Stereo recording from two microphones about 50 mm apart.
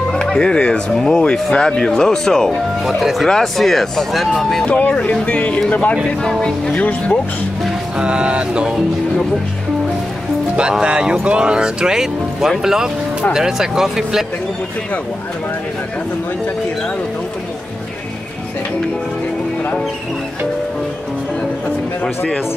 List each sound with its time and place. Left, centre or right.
0.1 s speech: centre
2.8 s speech: centre
4.6 s speech: left
8.0 s a sound: right
10.5 s speech: centre